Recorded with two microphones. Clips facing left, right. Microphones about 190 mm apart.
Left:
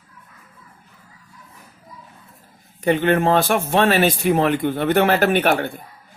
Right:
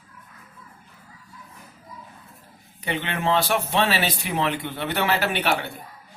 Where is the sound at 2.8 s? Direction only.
45° left (ahead or behind).